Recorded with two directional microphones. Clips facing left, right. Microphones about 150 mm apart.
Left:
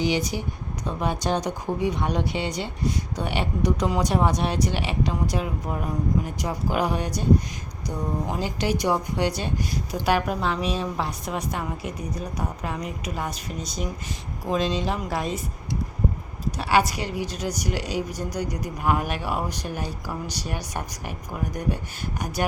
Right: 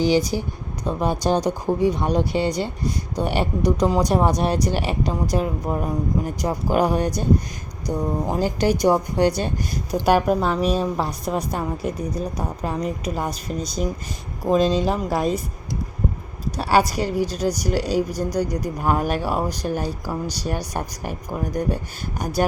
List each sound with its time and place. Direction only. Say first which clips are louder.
0.0 s speech: right 5 dB; 35° right (ahead or behind)
8.3 s speech: right 7 dB; 45° right (ahead or behind)
16.6 s speech: right 3 dB; 40° right (ahead or behind)